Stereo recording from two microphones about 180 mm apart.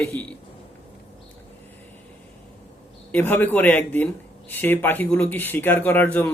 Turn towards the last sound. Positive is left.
turn(degrees=10)  # may be behind; listen again after turning